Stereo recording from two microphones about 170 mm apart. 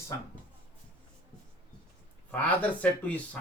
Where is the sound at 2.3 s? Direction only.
10° left (ahead or behind).